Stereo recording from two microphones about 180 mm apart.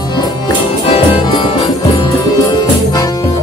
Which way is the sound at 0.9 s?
30° left (ahead or behind).